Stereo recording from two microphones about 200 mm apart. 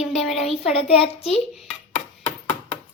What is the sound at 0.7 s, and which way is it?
Speech, 30° left (ahead or behind).